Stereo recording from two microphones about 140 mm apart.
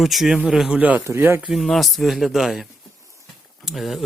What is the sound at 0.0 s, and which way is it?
Speech, centre (ahead or behind).